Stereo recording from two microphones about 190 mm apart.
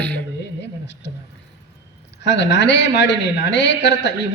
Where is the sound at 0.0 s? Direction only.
5° left (ahead or behind).